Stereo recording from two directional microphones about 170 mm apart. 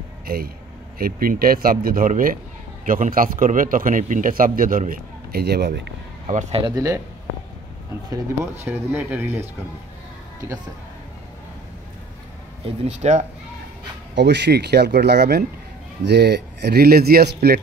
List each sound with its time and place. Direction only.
0.3 s a man's voice: 60° right (ahead or behind); by 5.9 s 75° right (ahead or behind)
6.2 s speech: 40° right (ahead or behind)
6.6 s speech: 20° right (ahead or behind)
8.6 s speech: 10° right (ahead or behind)
12.6 s speech: 40° right (ahead or behind)
14.1 s speech: 90° right; by 17.6 s 65° right (ahead or behind)